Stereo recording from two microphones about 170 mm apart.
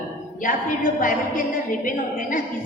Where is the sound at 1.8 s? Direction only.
55° left (ahead or behind).